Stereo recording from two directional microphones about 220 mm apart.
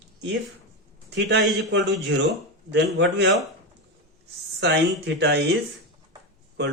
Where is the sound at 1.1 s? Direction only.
50° right (ahead or behind).